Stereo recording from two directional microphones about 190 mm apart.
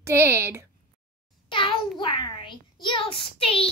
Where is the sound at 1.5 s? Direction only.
25° left (ahead or behind).